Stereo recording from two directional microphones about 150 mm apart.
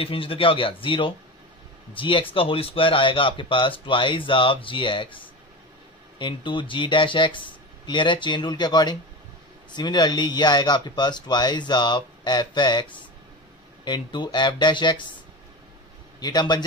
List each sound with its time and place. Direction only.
0.0 s speech: 40° left (ahead or behind)
13.8 s speech: 30° left (ahead or behind)
16.2 s speech: 25° left (ahead or behind)